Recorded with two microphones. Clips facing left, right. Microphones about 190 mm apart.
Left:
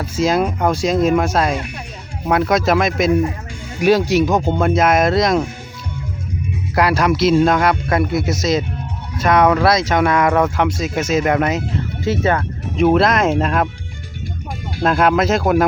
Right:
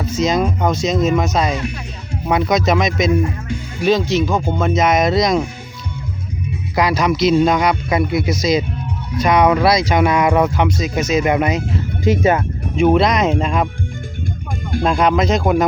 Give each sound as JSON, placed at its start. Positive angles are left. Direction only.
{"t": 0.0, "sound": "speech", "side_deg": 5}
{"t": 4.6, "sound": "speech", "side_deg": 5}
{"t": 6.7, "sound": "speech", "side_deg": 5}
{"t": 10.2, "sound": "speech", "side_deg": -10}
{"t": 10.5, "sound": "speech", "side_deg": 0}
{"t": 12.0, "sound": "speech", "side_deg": -15}
{"t": 12.7, "sound": "speech", "side_deg": 0}
{"t": 14.8, "sound": "speech", "side_deg": 5}